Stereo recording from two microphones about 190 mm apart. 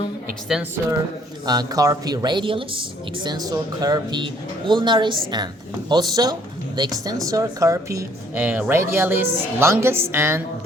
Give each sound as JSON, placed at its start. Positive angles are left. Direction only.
{"t": 0.5, "sound": "speech", "side_deg": 0}
{"t": 1.5, "sound": "a woman's voice", "side_deg": -20}